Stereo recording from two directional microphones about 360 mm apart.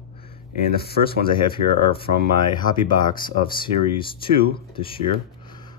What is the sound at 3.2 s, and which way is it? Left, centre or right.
Speech, centre.